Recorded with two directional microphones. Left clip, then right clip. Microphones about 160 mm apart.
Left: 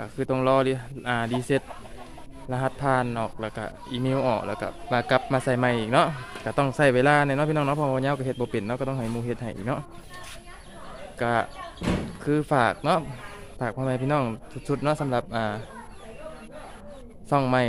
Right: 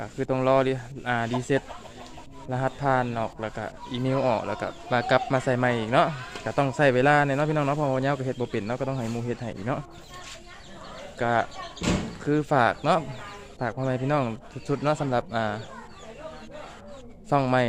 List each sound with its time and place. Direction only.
0.0 s a man's voice: 15° left (ahead or behind)
11.2 s a man's voice: 5° left (ahead or behind)
11.8 s speech: 75° right (ahead or behind)
12.2 s a man's voice: 10° left (ahead or behind)
17.2 s speech: 10° left (ahead or behind)